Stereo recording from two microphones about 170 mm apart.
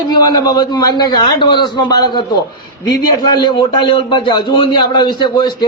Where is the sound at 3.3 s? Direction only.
25° left (ahead or behind).